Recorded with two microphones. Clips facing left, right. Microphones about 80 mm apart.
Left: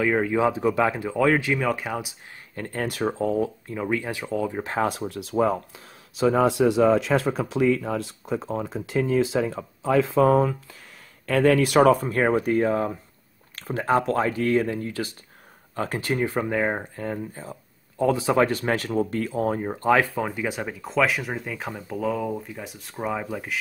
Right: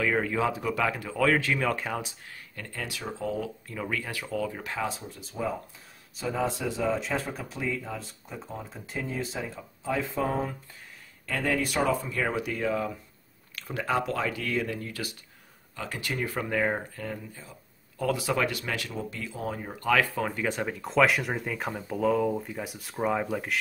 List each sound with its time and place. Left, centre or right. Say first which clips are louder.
0.0 s speech: left 5 dB; centre
2.5 s speech: left 9 dB; left
3.7 s speech: left 4 dB; left
4.7 s speech: left 11 dB; left
11.2 s speech: left 9 dB; left
15.7 s speech: left 8 dB; left; by 17.0 s centre
17.0 s speech: left 7 dB; left
17.9 s speech: left 7 dB; left
20.2 s speech: left 2 dB; centre